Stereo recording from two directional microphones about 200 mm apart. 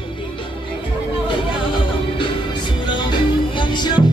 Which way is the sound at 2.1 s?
20° left (ahead or behind).